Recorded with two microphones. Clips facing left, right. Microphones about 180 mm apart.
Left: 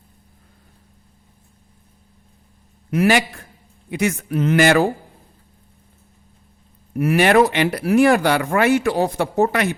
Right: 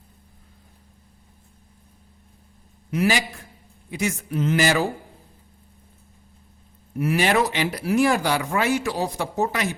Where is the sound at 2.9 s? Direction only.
60° left (ahead or behind).